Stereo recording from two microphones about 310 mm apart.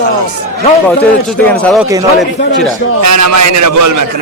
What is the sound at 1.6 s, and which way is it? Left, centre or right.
Speech, centre.